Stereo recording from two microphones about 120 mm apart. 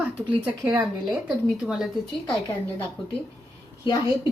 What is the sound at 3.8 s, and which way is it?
Speech, 45° left (ahead or behind).